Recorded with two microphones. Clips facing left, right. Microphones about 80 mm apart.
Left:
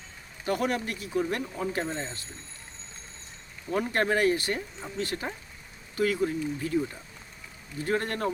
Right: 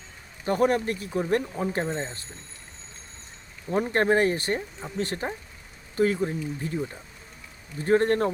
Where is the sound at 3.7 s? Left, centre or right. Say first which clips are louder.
Right 4 dB; right.